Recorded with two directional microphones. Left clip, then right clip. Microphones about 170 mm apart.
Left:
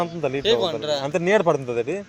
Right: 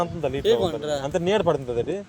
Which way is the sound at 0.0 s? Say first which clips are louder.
Left 1 dB; 30° left (ahead or behind).